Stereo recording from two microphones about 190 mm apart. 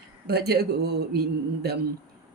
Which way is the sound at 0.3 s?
60° right (ahead or behind).